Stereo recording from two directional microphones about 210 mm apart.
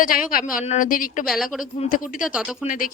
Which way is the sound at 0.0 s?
40° left (ahead or behind).